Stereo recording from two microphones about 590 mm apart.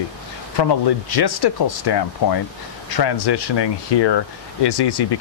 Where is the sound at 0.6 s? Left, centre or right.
Left.